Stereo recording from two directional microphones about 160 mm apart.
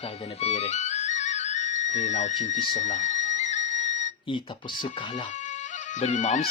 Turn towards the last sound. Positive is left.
turn(degrees=50)  # may be behind; listen again after turning